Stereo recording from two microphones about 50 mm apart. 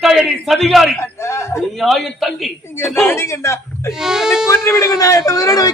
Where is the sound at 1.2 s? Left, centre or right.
Left.